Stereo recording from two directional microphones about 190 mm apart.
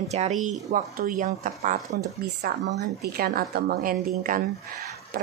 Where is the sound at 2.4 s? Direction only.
60° right (ahead or behind).